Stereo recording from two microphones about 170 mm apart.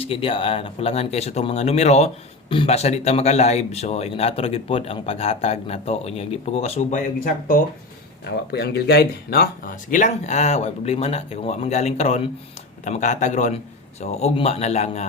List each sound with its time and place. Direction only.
0.0 s a man's voice: 35° left (ahead or behind)
8.2 s a man's voice: 70° left (ahead or behind); by 15.0 s 40° left (ahead or behind)